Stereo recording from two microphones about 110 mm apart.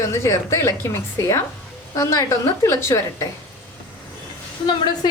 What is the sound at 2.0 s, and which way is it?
A woman's voice, 30° left (ahead or behind).